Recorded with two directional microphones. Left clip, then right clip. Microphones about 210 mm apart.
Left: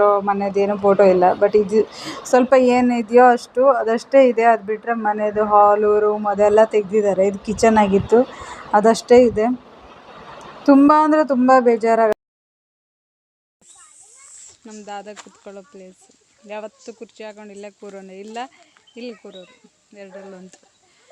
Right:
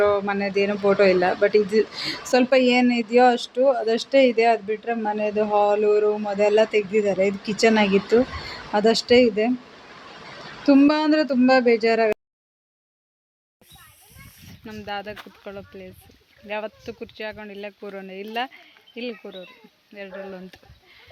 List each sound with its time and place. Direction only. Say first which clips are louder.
0.0 s speech: left 5 dB; centre (ahead or behind)
10.6 s speech: left 5 dB; 5° left (ahead or behind)
14.4 s speech: right 2 dB; centre (ahead or behind)